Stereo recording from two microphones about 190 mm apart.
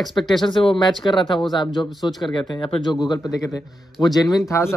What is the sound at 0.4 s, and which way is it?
A man's voice, 25° left (ahead or behind).